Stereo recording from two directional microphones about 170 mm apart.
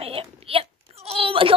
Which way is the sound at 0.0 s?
35° right (ahead or behind).